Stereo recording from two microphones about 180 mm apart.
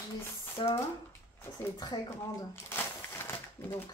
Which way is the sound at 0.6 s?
30° left (ahead or behind).